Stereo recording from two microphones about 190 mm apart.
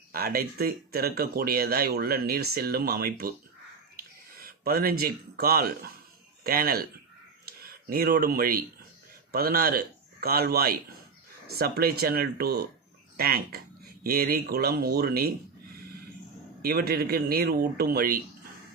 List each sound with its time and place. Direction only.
0.1 s speech: 50° right (ahead or behind)
16.6 s speech: 55° right (ahead or behind)